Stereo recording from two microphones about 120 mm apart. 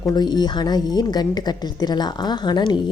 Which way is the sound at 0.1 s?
35° left (ahead or behind).